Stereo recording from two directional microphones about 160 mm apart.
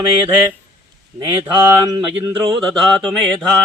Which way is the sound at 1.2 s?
20° right (ahead or behind).